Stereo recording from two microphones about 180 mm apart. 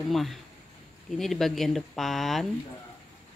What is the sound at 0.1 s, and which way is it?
Speech, centre (ahead or behind).